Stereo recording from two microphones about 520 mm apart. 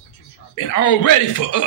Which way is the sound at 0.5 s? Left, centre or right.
Left.